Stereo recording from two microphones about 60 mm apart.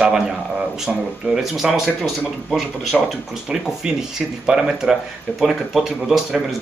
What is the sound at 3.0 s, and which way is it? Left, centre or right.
Speech, centre.